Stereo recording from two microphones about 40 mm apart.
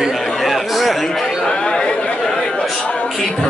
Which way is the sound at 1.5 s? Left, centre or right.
Left.